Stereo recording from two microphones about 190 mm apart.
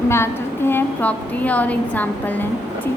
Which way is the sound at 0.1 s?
10° left (ahead or behind).